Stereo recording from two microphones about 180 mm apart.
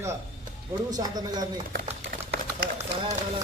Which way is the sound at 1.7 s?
55° right (ahead or behind).